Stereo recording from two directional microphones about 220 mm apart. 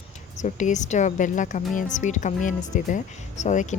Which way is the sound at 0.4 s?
35° left (ahead or behind).